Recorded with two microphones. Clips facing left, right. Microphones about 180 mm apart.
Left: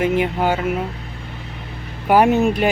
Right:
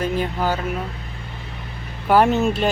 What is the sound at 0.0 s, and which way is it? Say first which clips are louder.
Speech: left 4 dB; 20° left (ahead or behind).